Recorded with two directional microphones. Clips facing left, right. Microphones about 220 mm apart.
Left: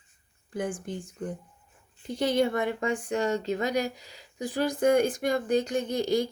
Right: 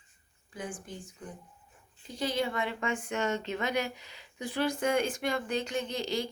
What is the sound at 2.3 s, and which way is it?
Speech, 45° left (ahead or behind).